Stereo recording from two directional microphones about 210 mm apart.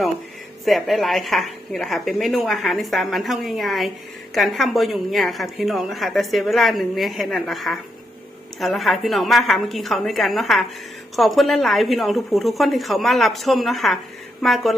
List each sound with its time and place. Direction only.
0.6 s a woman's voice: centre (ahead or behind)